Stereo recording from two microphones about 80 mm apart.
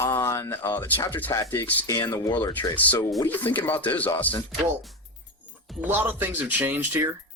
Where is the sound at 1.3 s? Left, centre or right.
Left.